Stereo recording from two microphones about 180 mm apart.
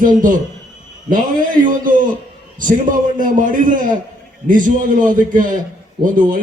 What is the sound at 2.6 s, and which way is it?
A man's voice, 50° right (ahead or behind).